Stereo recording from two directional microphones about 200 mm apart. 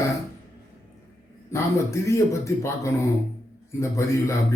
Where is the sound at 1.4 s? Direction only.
15° left (ahead or behind).